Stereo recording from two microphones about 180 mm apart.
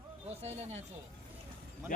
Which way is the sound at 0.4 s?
40° right (ahead or behind).